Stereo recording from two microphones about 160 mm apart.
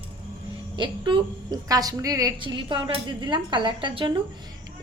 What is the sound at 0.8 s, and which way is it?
A woman's voice, 30° right (ahead or behind).